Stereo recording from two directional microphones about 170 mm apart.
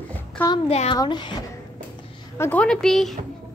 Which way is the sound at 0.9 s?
25° left (ahead or behind).